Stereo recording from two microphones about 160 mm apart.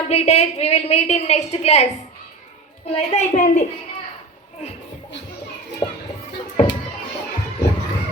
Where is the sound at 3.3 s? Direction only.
55° left (ahead or behind).